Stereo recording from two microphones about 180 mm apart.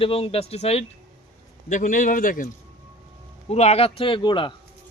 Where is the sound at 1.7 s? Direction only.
45° left (ahead or behind).